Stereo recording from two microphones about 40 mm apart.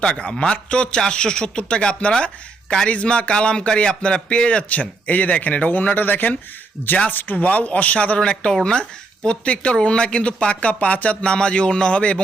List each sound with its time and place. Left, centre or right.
0.0 s speech: left
7.3 s speech: left